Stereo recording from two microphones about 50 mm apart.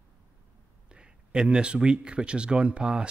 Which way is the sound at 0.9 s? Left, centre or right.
Centre.